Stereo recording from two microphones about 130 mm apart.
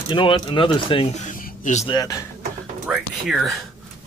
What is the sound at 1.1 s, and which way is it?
Speech, 80° left.